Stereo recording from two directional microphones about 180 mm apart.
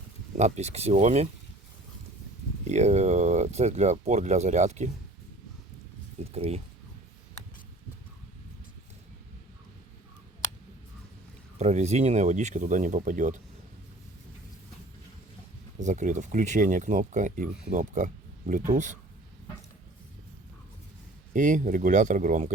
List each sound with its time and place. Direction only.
0.3 s speech: 40° right (ahead or behind)
2.6 s speech: 40° right (ahead or behind)
6.3 s speech: 35° right (ahead or behind)
11.5 s speech: 40° right (ahead or behind)
15.8 s speech: 45° right (ahead or behind)
21.3 s speech: 45° right (ahead or behind)